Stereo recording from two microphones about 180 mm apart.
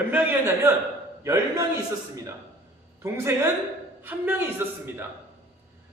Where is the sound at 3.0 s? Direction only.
15° right (ahead or behind).